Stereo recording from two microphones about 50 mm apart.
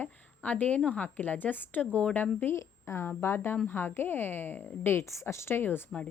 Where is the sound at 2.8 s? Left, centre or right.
Left.